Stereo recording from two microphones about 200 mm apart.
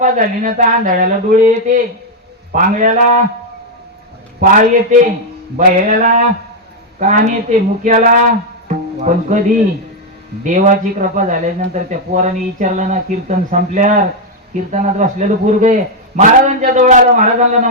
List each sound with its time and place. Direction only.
0.0 s speech: 40° right (ahead or behind)
4.4 s speech: 40° right (ahead or behind)
8.6 s music: 35° right (ahead or behind)
10.4 s speech: 40° right (ahead or behind)